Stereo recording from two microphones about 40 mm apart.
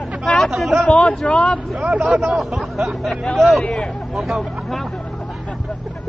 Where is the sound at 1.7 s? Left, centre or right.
Right.